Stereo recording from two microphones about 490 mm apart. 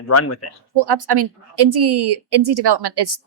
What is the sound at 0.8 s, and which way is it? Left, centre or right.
A woman's voice, right.